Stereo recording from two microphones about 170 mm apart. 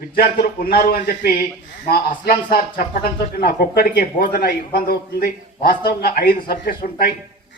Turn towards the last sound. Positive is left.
turn(degrees=60)  # may be behind; listen again after turning